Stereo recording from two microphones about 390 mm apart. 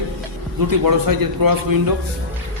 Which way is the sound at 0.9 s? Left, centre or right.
Right.